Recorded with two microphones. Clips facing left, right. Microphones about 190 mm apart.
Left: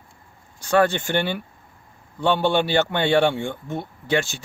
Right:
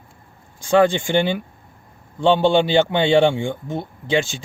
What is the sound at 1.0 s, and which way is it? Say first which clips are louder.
Speech: right 4 dB; 15° right (ahead or behind).